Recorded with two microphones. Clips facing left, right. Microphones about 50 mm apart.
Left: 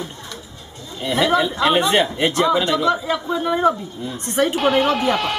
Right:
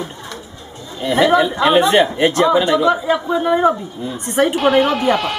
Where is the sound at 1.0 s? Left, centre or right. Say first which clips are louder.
Right 4 dB; centre.